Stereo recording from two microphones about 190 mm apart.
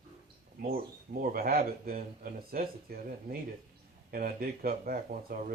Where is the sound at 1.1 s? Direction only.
50° right (ahead or behind).